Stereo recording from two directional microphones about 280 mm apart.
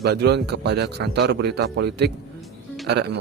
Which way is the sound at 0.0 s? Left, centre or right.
Right.